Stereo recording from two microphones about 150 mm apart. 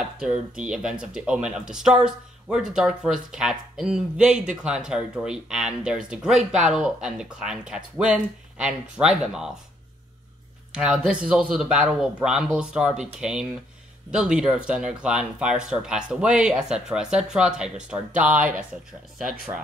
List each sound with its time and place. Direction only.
0.2 s speech: 5° right (ahead or behind)
10.7 s speech: 5° right (ahead or behind)